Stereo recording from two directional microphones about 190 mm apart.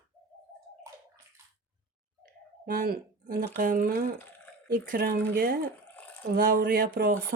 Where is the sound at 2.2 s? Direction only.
50° right (ahead or behind).